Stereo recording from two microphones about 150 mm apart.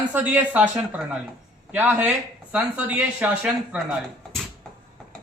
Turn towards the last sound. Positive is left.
turn(degrees=-5)  # may be behind; listen again after turning